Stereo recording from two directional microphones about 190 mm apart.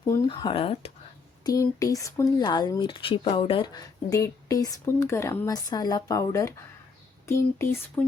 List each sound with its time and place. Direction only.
0.1 s speech: 25° left (ahead or behind)
1.5 s speech: 20° left (ahead or behind)